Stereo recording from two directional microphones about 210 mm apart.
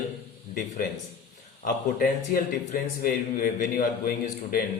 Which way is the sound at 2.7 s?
40° left (ahead or behind).